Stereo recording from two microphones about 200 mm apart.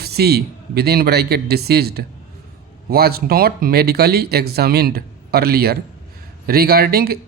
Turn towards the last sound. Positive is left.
turn(degrees=-50)  # may be behind; listen again after turning